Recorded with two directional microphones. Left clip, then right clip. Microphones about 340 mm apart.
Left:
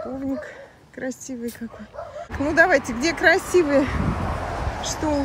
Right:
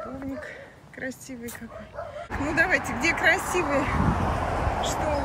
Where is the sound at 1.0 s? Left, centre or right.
Centre.